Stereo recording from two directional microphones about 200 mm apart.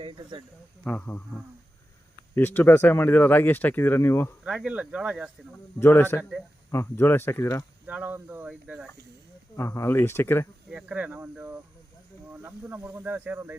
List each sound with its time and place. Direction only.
0.0 s speech: 25° right (ahead or behind)
0.9 s speech: 10° left (ahead or behind)
2.3 s speech: 10° left (ahead or behind)
4.4 s speech: 5° right (ahead or behind)
5.8 s speech: 10° left (ahead or behind)
7.9 s speech: 10° right (ahead or behind)
9.6 s speech: 15° left (ahead or behind)
10.7 s speech: 5° right (ahead or behind)